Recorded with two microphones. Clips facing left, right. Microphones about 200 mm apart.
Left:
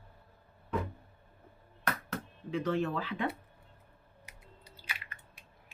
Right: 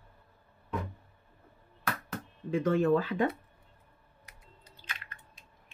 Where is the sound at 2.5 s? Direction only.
50° right (ahead or behind).